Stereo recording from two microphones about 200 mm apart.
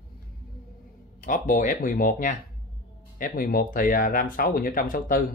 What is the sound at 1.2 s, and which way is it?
Speech, 40° left (ahead or behind).